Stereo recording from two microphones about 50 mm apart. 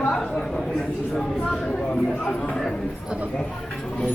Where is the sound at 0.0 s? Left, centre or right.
Centre.